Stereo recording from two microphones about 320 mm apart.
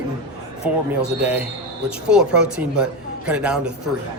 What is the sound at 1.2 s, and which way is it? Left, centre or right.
Speech, centre.